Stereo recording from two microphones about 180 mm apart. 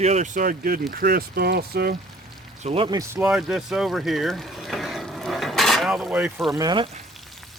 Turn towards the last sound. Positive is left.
turn(degrees=-25)  # may be behind; listen again after turning